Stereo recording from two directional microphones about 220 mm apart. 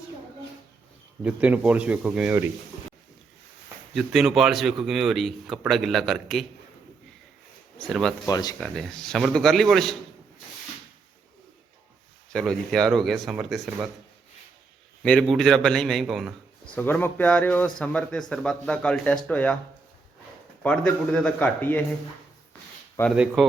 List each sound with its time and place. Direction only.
1.2 s speech: 5° right (ahead or behind)
3.9 s speech: centre (ahead or behind)
7.8 s speech: centre (ahead or behind)
8.3 s speech: 15° left (ahead or behind)
8.6 s speech: 5° left (ahead or behind)
12.3 s speech: centre (ahead or behind)
15.0 s speech: 5° left (ahead or behind)
20.6 s speech: 5° left (ahead or behind)
23.1 s speech: centre (ahead or behind)